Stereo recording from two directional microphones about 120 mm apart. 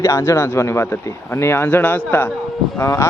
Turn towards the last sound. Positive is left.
turn(degrees=25)  # may be behind; listen again after turning